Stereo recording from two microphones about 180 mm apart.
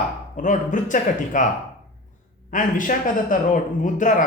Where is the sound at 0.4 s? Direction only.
45° left (ahead or behind).